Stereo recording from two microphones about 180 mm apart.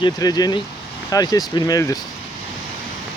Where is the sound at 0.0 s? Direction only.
20° left (ahead or behind).